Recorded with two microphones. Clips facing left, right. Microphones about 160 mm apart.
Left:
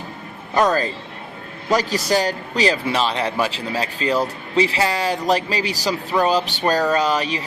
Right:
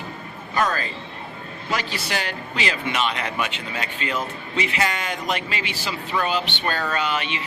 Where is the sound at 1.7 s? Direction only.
40° left (ahead or behind).